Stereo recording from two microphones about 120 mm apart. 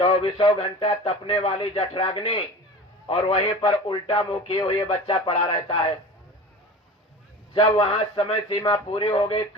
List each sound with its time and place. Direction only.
0.0 s a man's voice: 50° left (ahead or behind)
7.5 s a man's voice: 45° left (ahead or behind)